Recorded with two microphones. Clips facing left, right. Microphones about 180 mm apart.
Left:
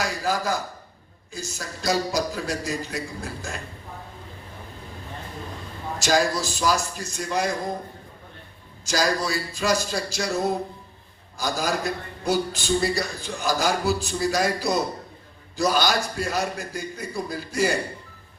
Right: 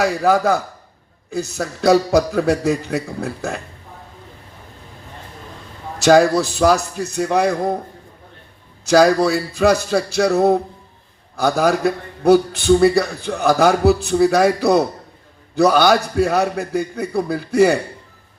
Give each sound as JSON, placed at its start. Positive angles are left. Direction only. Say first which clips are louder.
{"t": 0.0, "sound": "a man's voice", "louder": "right 10 dB", "side_deg": -60}
{"t": 6.0, "sound": "a man's voice", "louder": "right 10 dB", "side_deg": -60}
{"t": 8.8, "sound": "a man's voice", "louder": "right 11 dB", "side_deg": -60}